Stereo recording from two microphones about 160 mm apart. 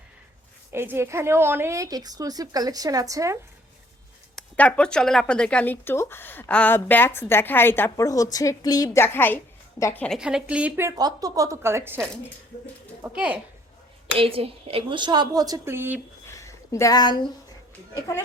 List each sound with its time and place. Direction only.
0.7 s a woman's voice: 15° right (ahead or behind)
4.4 s a woman's voice: 5° left (ahead or behind)
10.2 s a woman's voice: 5° right (ahead or behind)
14.2 s a woman's voice: 35° right (ahead or behind); by 16.0 s 15° right (ahead or behind)
16.2 s a sound: 20° left (ahead or behind)